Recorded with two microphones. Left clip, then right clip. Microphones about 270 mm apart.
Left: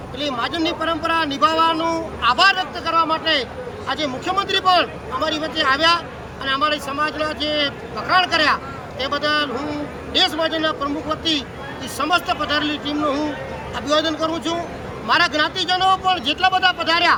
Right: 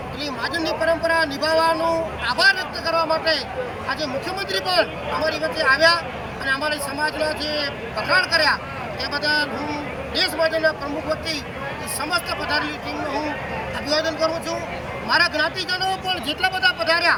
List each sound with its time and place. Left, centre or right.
0.2 s speech: left
12.5 s speech: left
13.8 s speech: left